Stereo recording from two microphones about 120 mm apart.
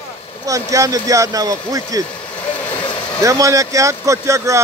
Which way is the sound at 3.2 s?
25° right (ahead or behind).